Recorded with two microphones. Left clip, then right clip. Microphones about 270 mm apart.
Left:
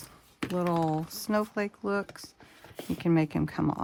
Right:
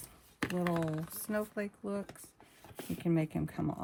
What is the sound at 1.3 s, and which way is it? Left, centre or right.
Speech, left.